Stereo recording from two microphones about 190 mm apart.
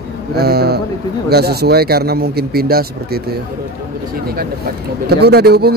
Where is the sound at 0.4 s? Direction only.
55° right (ahead or behind).